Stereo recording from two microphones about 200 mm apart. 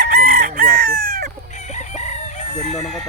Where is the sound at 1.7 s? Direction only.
35° left (ahead or behind).